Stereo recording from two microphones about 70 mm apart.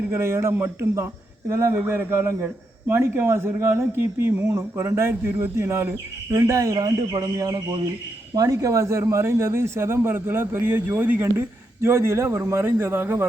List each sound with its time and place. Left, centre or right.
0.1 s a man's voice: right
1.7 s a man's voice: right